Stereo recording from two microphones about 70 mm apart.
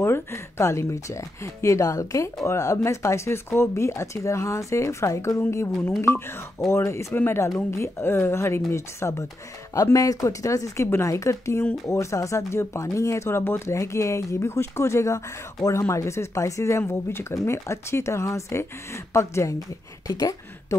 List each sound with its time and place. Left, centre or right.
0.0 s speech: left
5.9 s speech: left
9.9 s speech: left
20.1 s a woman's voice: left